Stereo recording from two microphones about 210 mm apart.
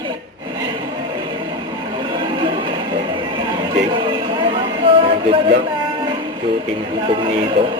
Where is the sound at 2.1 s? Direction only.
25° right (ahead or behind).